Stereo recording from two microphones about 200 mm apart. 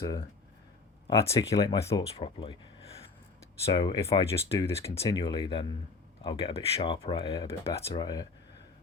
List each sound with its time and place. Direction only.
0.0 s speech: 15° left (ahead or behind)
3.7 s speech: 25° left (ahead or behind)